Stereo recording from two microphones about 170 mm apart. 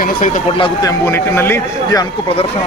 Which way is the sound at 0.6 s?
30° left (ahead or behind).